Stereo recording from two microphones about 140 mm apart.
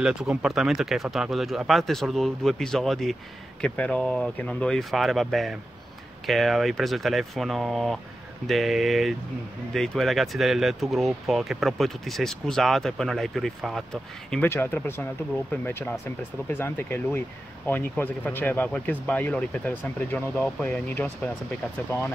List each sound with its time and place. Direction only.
0.0 s speech: 5° right (ahead or behind)
14.3 s speech: 15° left (ahead or behind)